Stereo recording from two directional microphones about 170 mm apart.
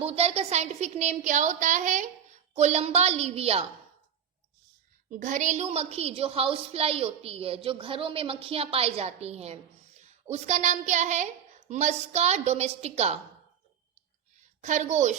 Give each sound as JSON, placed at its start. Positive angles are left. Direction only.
{"t": 0.0, "sound": "a woman's voice", "side_deg": -35}
{"t": 5.1, "sound": "a woman's voice", "side_deg": -45}
{"t": 14.6, "sound": "a woman's voice", "side_deg": -45}